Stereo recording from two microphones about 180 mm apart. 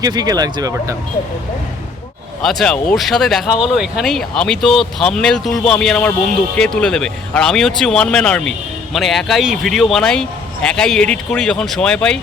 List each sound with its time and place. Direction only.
0.0 s speech: 20° right (ahead or behind)
2.4 s speech: centre (ahead or behind)